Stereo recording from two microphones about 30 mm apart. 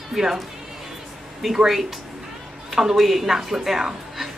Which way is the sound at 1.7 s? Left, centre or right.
Centre.